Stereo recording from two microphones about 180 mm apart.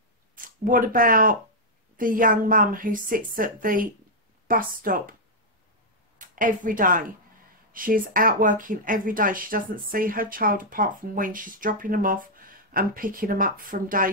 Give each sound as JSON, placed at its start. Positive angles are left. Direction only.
{"t": 0.4, "sound": "speech", "side_deg": -50}
{"t": 6.1, "sound": "speech", "side_deg": -45}